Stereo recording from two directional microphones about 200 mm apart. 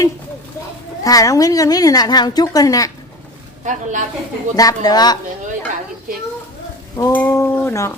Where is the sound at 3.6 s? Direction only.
40° right (ahead or behind).